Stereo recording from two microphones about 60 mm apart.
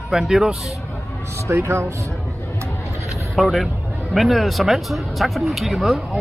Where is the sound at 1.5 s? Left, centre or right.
Right.